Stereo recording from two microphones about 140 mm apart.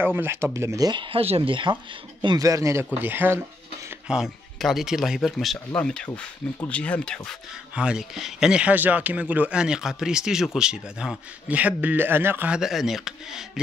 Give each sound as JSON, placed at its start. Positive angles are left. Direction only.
{"t": 0.0, "sound": "speech", "side_deg": -15}
{"t": 4.1, "sound": "speech", "side_deg": 0}
{"t": 7.2, "sound": "speech", "side_deg": -5}